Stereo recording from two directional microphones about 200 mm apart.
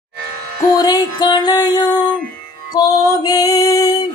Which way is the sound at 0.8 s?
20° left (ahead or behind).